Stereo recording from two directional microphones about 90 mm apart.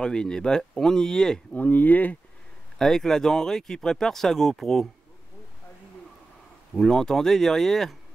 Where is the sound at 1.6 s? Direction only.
20° left (ahead or behind).